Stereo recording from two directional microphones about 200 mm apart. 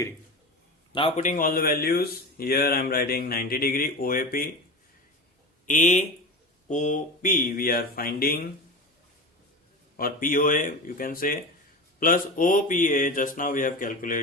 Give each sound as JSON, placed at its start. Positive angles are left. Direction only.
{"t": 0.9, "sound": "speech", "side_deg": 30}
{"t": 5.6, "sound": "speech", "side_deg": 40}
{"t": 10.0, "sound": "speech", "side_deg": 45}